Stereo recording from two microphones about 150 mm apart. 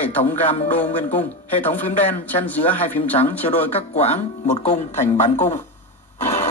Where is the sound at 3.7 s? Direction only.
45° left (ahead or behind).